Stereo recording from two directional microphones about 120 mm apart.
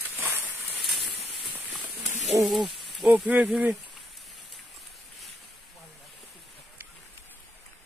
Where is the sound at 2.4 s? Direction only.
30° right (ahead or behind).